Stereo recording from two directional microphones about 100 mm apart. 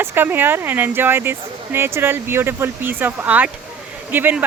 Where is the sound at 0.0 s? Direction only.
20° right (ahead or behind).